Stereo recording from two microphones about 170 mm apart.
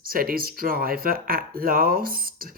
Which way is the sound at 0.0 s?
55° right (ahead or behind).